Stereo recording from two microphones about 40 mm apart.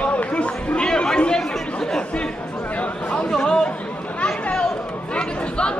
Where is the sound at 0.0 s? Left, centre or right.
Left.